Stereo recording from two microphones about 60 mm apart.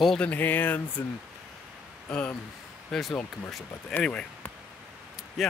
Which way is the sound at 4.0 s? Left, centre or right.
Centre.